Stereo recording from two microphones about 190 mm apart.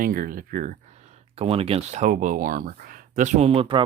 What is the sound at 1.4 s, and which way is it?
Speech, 30° right (ahead or behind).